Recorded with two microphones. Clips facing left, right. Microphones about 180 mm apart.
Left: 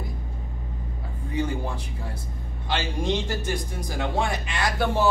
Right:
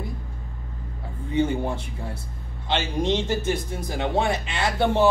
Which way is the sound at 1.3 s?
25° right (ahead or behind).